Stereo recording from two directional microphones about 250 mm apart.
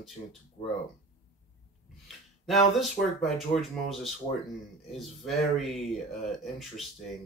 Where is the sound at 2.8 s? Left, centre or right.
Centre.